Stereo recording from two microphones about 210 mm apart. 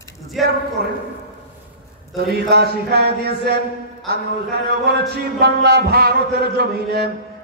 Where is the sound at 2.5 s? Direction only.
50° right (ahead or behind).